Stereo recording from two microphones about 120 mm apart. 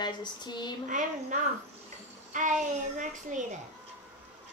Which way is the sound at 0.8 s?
90° right.